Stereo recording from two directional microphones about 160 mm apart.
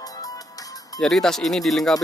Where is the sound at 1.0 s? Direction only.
5° left (ahead or behind).